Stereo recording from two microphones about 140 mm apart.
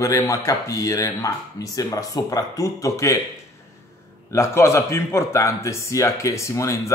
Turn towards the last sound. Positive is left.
turn(degrees=20)  # may be behind; listen again after turning